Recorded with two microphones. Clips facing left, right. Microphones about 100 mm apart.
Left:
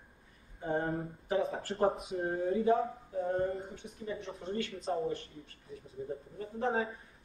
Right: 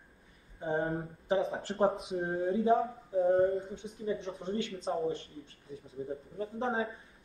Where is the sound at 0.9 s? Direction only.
25° right (ahead or behind).